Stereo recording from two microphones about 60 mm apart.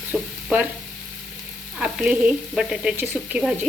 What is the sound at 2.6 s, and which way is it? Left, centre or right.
Speech, centre.